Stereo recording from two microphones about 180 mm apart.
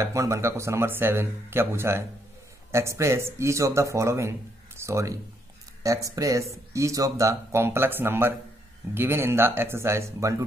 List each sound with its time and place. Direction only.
0.0 s speech: 15° right (ahead or behind)